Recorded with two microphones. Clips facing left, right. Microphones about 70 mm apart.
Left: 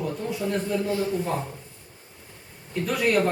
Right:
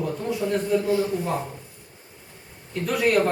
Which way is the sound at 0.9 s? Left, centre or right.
Centre.